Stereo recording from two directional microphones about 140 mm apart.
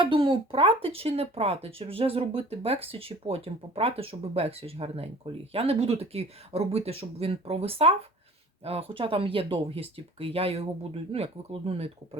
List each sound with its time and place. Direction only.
0.0 s speech: 40° right (ahead or behind)